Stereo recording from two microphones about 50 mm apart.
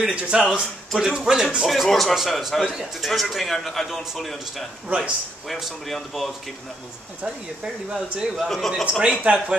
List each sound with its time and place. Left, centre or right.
0.1 s speech: right
0.6 s a man's voice: centre
2.6 s a man's voice: centre
4.8 s speech: right
5.9 s a man's voice: centre
7.2 s speech: centre
8.5 s a man's voice: centre
9.2 s speech: right